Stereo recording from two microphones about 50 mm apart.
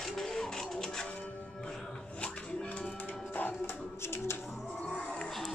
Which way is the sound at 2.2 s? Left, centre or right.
Left.